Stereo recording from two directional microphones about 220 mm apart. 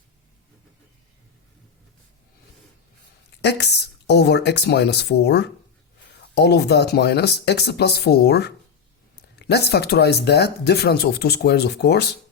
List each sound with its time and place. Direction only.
3.4 s speech: 50° left (ahead or behind)